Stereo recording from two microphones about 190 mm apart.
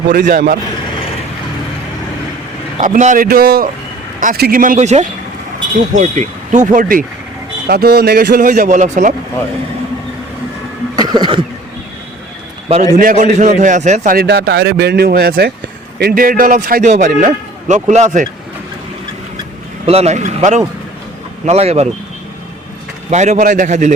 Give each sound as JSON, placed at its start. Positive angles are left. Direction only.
{"t": 0.1, "sound": "a man's voice", "side_deg": -50}
{"t": 2.7, "sound": "a man's voice", "side_deg": -40}
{"t": 7.7, "sound": "speech", "side_deg": -55}
{"t": 8.4, "sound": "a man's voice", "side_deg": -40}
{"t": 10.9, "sound": "a sound", "side_deg": -20}
{"t": 13.0, "sound": "a man's voice", "side_deg": -45}
{"t": 14.2, "sound": "a man's voice", "side_deg": -60}
{"t": 19.9, "sound": "a man's voice", "side_deg": -35}
{"t": 23.0, "sound": "a man's voice", "side_deg": -40}